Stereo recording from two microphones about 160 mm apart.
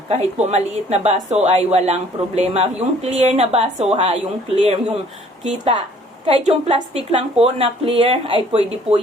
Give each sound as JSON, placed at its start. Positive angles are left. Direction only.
{"t": 0.1, "sound": "a woman's voice", "side_deg": -40}
{"t": 6.2, "sound": "speech", "side_deg": -40}